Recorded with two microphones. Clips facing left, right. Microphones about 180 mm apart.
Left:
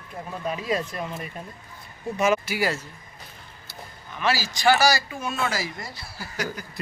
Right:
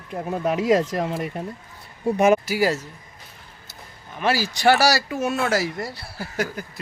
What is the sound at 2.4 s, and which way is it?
Speech, 40° right (ahead or behind).